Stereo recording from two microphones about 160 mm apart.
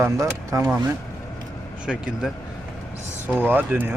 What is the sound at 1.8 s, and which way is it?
Speech, 5° right (ahead or behind).